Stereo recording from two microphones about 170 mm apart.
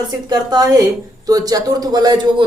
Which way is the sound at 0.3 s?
25° right (ahead or behind).